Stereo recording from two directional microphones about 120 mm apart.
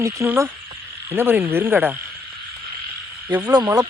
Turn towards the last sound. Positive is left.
turn(degrees=-35)  # may be behind; listen again after turning